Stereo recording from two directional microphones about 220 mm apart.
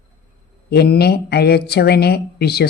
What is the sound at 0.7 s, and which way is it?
A woman's voice, 50° left (ahead or behind).